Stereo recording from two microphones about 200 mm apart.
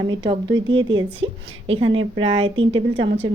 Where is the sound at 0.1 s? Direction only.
25° right (ahead or behind).